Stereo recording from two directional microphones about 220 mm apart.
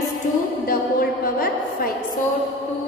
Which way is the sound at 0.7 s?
40° left (ahead or behind).